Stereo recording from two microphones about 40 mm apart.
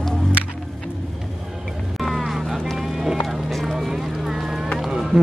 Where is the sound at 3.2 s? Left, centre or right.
Centre.